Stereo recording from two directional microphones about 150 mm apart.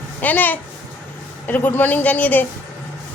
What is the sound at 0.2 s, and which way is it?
Speech, 10° left (ahead or behind).